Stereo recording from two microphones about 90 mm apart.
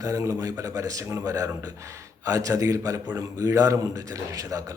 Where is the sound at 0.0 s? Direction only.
35° right (ahead or behind).